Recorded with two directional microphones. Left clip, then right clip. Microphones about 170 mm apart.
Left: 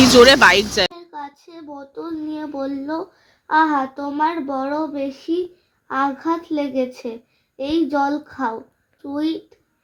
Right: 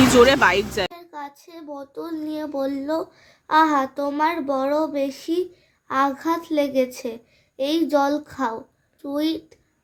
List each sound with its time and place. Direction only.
0.0 s speech: centre (ahead or behind)
1.5 s a child's voice: 10° right (ahead or behind)